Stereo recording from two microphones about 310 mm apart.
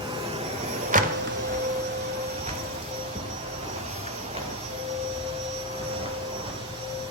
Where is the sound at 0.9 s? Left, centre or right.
Right.